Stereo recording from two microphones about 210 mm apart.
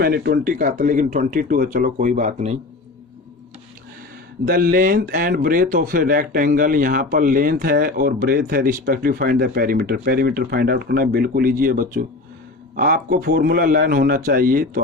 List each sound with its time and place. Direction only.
0.0 s speech: 45° right (ahead or behind)
4.4 s speech: 45° right (ahead or behind)